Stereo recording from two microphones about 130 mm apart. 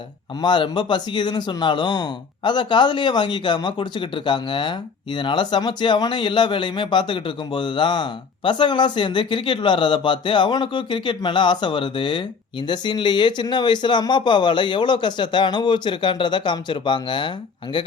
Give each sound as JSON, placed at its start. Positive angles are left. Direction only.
{"t": 0.4, "sound": "a man's voice", "side_deg": 35}